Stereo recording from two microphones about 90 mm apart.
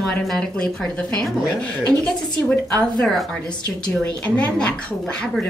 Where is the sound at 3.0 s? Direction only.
5° left (ahead or behind).